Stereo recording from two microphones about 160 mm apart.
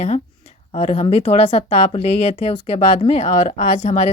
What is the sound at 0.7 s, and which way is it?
A woman's voice, 40° left (ahead or behind).